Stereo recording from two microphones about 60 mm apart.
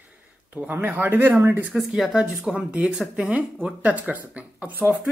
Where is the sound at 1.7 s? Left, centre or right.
Centre.